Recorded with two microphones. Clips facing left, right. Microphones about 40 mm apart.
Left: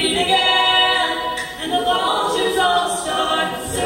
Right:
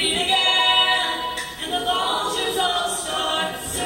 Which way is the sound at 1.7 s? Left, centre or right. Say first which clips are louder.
Left 4 dB; centre.